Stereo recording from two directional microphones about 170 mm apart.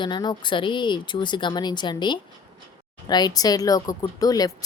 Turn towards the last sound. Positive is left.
turn(degrees=20)  # may be behind; listen again after turning